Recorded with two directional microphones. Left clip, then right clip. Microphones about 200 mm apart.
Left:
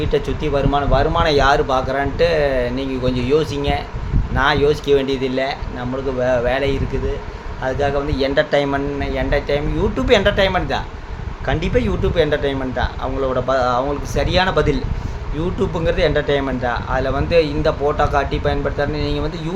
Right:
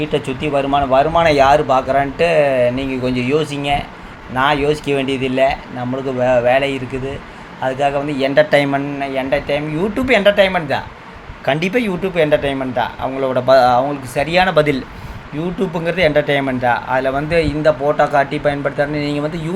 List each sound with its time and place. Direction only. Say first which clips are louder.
0.0 s speech: right 1 dB; centre (ahead or behind)
5.0 s speech: right 1 dB; 40° left (ahead or behind)
5.3 s a man's voice: right 6 dB; 5° right (ahead or behind)